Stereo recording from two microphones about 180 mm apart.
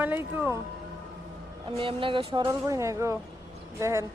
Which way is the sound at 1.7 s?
30° right (ahead or behind).